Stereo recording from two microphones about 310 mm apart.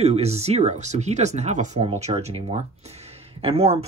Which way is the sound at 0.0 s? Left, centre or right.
Right.